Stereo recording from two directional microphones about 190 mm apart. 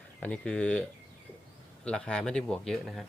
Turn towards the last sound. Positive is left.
turn(degrees=0)  # may be behind; listen again after turning